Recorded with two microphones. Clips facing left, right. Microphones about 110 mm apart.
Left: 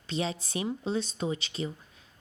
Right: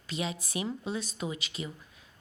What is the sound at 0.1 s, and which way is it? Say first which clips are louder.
A woman's voice: left 3 dB; 30° left (ahead or behind).